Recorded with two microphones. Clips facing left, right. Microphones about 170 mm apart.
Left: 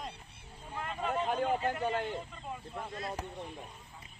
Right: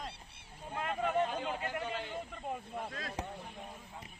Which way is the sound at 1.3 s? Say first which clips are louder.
Left 6 dB; 55° left (ahead or behind).